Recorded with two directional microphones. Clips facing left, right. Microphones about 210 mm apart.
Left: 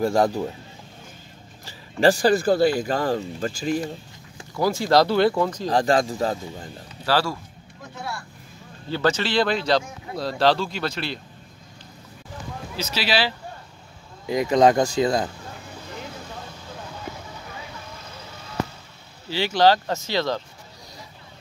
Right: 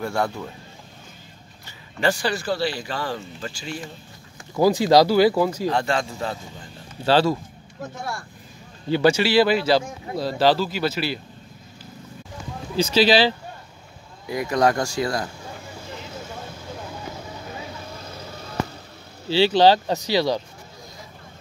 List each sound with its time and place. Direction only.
0.0 s speech: 35° left (ahead or behind)
1.7 s speech: 35° left (ahead or behind)
2.3 s speech: 50° left (ahead or behind)
4.6 s speech: 20° right (ahead or behind)
5.7 s speech: 35° left (ahead or behind)
7.1 s speech: 20° right (ahead or behind)
8.9 s speech: 10° right (ahead or behind)
12.7 s speech: 30° right (ahead or behind)
14.2 s speech: 20° left (ahead or behind)
19.5 s speech: 15° right (ahead or behind)